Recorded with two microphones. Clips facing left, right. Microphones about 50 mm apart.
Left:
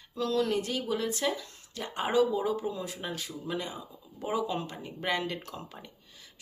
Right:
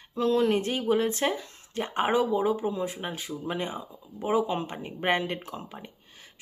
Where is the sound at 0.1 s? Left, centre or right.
Right.